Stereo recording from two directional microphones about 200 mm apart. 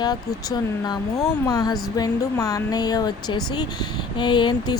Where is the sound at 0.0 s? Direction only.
20° left (ahead or behind).